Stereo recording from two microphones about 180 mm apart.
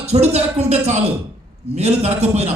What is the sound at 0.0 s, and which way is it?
Speech, 35° right (ahead or behind).